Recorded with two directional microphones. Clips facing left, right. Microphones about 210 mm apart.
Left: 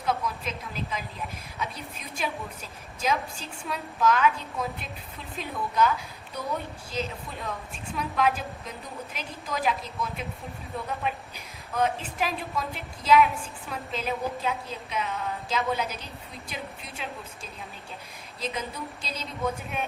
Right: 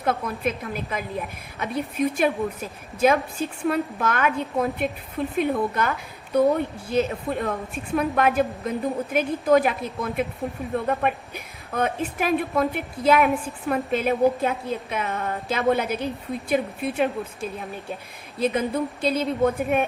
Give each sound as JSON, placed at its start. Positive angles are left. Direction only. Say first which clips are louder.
{"t": 0.0, "sound": "a woman's voice", "louder": "right 5 dB", "side_deg": -55}